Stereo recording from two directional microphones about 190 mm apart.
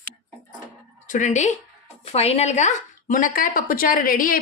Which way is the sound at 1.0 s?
40° left (ahead or behind).